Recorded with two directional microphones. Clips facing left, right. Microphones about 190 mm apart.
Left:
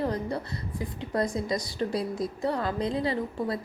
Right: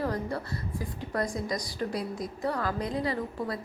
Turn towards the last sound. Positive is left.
turn(degrees=25)  # may be behind; listen again after turning